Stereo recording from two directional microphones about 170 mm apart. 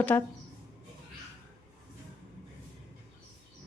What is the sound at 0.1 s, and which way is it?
Speech, 15° left (ahead or behind).